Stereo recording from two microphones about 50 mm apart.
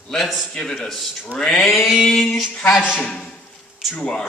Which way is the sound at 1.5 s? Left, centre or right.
Centre.